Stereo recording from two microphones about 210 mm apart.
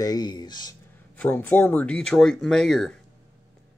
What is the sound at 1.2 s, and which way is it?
Speech, 10° left (ahead or behind).